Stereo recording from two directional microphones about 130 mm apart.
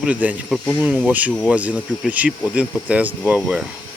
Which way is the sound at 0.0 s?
10° right (ahead or behind).